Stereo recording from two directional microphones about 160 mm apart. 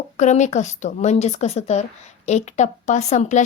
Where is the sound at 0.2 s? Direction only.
50° left (ahead or behind).